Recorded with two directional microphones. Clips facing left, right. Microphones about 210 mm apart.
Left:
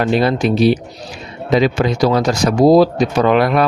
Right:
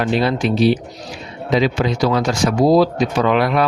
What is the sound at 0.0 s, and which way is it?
Speech, 45° left (ahead or behind).